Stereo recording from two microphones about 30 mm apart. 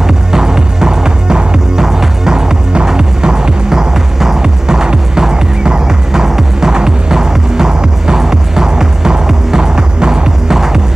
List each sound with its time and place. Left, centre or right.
0.0 s music: centre
10.5 s music: centre